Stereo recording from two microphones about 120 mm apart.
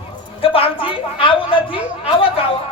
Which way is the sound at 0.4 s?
50° left (ahead or behind).